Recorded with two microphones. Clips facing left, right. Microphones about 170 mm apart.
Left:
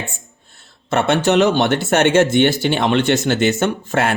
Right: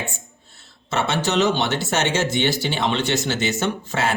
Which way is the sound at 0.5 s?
55° left (ahead or behind).